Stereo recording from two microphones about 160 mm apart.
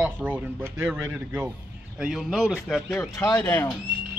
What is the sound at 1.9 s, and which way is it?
Speech, 5° right (ahead or behind).